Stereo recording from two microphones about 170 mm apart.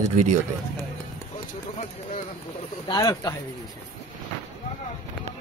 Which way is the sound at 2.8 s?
20° left (ahead or behind).